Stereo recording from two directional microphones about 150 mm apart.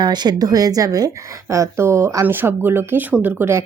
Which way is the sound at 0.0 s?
30° right (ahead or behind).